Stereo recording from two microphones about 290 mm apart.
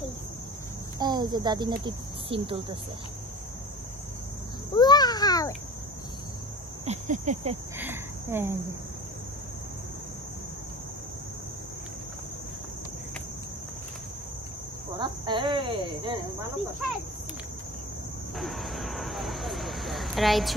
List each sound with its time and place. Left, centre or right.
0.9 s a child's voice: centre
4.7 s a sound: centre
6.9 s cricket: right
7.8 s cricket: centre
15.0 s speech: centre
18.4 s speech: centre